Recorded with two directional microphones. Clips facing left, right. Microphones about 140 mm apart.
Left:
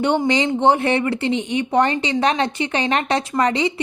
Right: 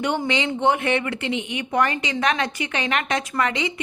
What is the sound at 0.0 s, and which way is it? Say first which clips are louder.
A woman's voice: left 5 dB; 35° left (ahead or behind).